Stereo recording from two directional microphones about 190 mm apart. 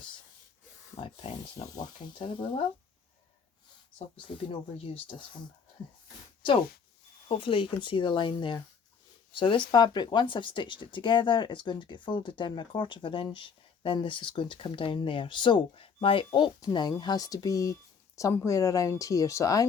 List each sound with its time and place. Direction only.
0.9 s speech: 25° left (ahead or behind)
7.3 s speech: 25° left (ahead or behind)